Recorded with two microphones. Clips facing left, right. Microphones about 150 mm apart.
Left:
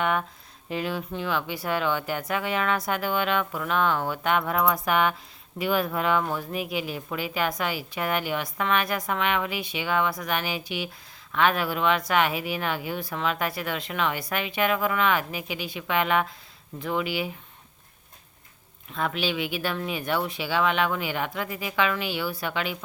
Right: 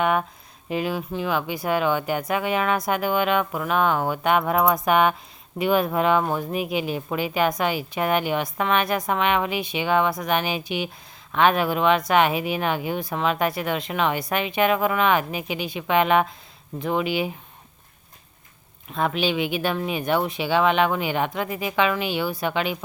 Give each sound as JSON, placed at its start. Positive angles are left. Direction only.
{"t": 0.7, "sound": "speech", "side_deg": -15}
{"t": 18.9, "sound": "speech", "side_deg": -20}